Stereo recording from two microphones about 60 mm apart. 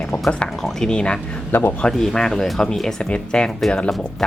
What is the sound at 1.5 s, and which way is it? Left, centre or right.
Speech, left.